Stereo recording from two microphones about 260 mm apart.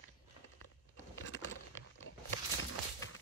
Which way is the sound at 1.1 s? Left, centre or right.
Left.